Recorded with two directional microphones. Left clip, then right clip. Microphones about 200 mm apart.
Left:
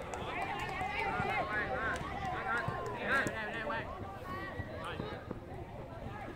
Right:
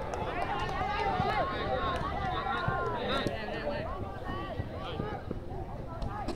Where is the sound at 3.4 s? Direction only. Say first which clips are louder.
Right 2 dB; 45° right (ahead or behind).